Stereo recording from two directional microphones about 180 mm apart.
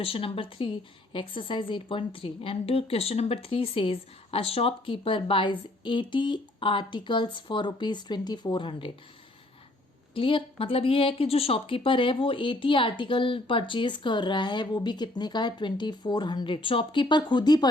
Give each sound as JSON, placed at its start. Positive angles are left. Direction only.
{"t": 0.0, "sound": "a woman's voice", "side_deg": 30}
{"t": 10.2, "sound": "a woman's voice", "side_deg": 30}